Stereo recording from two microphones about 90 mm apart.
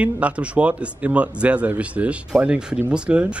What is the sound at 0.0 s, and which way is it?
Speech, 15° right (ahead or behind).